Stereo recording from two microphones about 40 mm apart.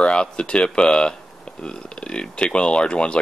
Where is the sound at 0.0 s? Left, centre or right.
Left.